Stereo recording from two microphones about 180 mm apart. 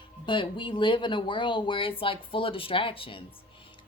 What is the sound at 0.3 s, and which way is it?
Speech, 25° left (ahead or behind).